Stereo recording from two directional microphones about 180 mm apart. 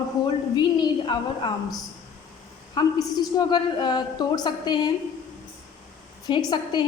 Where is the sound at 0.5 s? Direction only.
25° left (ahead or behind).